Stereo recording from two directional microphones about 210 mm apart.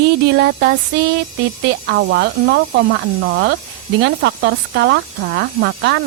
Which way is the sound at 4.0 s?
55° right (ahead or behind).